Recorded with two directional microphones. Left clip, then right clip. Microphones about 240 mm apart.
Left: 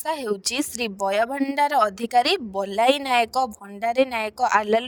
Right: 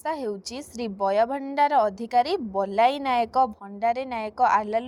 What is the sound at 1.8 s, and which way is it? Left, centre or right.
A woman's voice, left.